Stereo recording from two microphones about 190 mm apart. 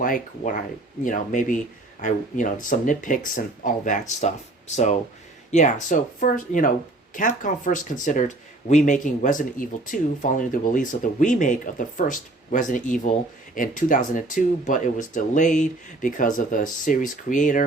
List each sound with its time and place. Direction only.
0.0 s speech: 45° left (ahead or behind)